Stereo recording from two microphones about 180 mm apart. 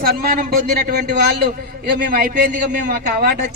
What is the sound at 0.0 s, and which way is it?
A man's voice, 55° right (ahead or behind).